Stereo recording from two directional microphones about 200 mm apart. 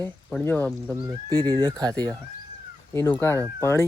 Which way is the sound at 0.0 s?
10° left (ahead or behind).